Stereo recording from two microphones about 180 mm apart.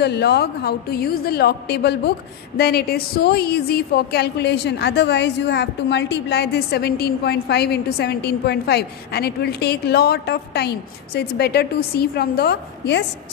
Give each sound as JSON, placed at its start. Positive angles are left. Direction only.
{"t": 0.0, "sound": "a woman's voice", "side_deg": 65}